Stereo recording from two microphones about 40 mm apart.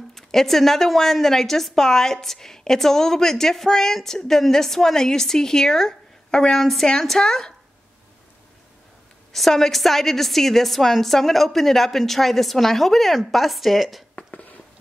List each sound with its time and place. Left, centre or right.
0.1 s a woman's voice: centre
9.3 s a woman's voice: centre
14.1 s a sound: left